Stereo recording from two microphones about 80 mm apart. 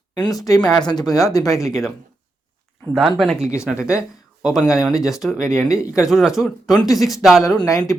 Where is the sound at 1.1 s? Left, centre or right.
Left.